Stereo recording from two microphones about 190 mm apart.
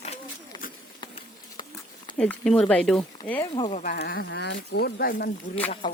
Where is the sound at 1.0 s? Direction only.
25° left (ahead or behind).